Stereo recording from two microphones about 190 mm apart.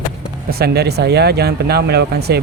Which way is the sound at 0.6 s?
60° right (ahead or behind).